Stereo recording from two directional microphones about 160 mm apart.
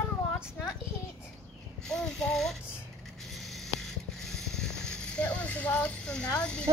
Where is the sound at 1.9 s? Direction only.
5° left (ahead or behind).